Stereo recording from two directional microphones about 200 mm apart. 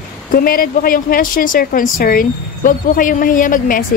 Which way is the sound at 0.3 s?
45° left (ahead or behind).